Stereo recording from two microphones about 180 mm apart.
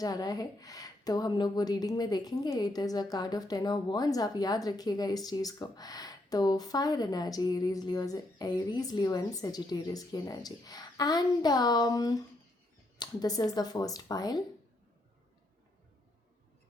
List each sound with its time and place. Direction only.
0.0 s speech: 20° left (ahead or behind)